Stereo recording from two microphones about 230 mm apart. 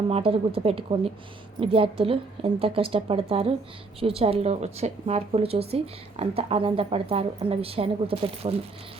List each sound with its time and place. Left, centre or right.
0.1 s a woman's voice: right